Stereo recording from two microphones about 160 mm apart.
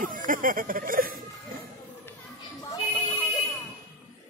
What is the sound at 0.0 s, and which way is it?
Speech, 60° right (ahead or behind).